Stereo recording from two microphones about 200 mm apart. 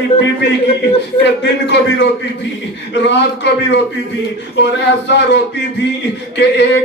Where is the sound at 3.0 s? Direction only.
60° left (ahead or behind).